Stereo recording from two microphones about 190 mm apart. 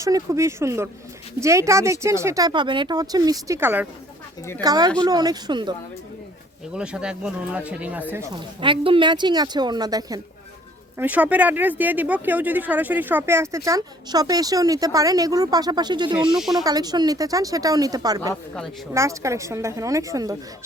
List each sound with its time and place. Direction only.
0.0 s speech: 15° right (ahead or behind)
6.7 s speech: 5° right (ahead or behind)
8.4 s speech: 25° right (ahead or behind)
10.9 s speech: 10° right (ahead or behind)
16.1 s speech: 5° right (ahead or behind)
16.6 s speech: 20° right (ahead or behind)